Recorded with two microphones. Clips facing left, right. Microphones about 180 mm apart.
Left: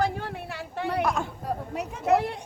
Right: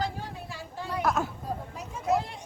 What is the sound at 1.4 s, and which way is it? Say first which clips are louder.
Speech: left 5 dB; 65° left (ahead or behind).